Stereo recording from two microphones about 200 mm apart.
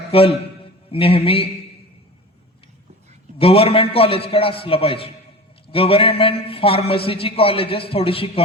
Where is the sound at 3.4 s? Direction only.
30° left (ahead or behind).